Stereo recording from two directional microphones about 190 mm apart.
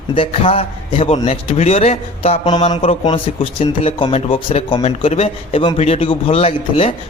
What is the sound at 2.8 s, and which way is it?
Speech, 35° left (ahead or behind).